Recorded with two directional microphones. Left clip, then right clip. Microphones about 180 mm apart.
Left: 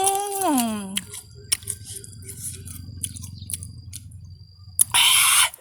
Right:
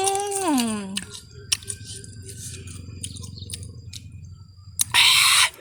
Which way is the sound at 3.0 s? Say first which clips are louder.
Right 1 dB; 5° left (ahead or behind).